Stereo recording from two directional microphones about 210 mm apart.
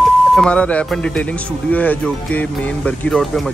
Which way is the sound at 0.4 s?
5° left (ahead or behind).